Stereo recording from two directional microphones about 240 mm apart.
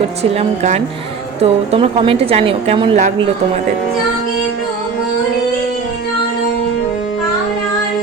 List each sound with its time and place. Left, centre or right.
0.2 s a woman's voice: right